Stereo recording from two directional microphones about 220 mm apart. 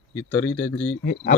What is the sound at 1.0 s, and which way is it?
Speech, 50° left (ahead or behind).